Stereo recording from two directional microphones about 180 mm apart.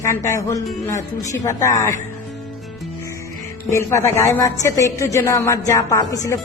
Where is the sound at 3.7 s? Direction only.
15° left (ahead or behind).